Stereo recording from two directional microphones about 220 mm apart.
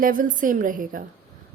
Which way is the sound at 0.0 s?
40° right (ahead or behind).